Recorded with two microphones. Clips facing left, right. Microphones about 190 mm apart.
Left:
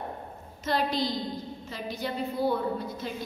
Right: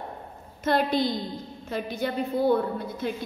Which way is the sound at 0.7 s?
55° right (ahead or behind).